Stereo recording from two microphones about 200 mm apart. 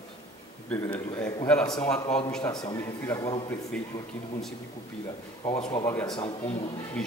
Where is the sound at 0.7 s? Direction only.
10° left (ahead or behind).